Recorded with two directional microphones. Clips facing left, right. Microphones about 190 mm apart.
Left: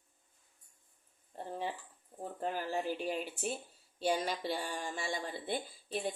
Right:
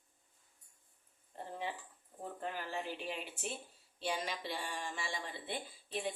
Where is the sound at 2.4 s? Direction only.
40° left (ahead or behind).